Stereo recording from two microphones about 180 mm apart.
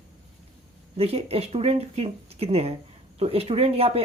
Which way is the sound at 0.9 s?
35° right (ahead or behind).